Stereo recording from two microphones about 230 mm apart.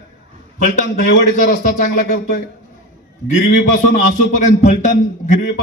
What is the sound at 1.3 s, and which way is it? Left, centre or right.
A man's voice, left.